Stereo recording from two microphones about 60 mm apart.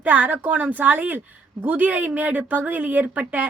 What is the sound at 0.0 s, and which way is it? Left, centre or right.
A woman's voice, right.